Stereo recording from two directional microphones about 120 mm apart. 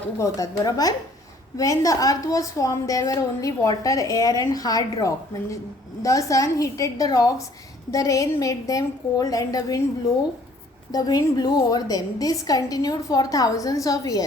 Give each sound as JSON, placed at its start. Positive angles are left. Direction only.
{"t": 0.2, "sound": "a woman's voice", "side_deg": 30}
{"t": 10.9, "sound": "a woman's voice", "side_deg": 35}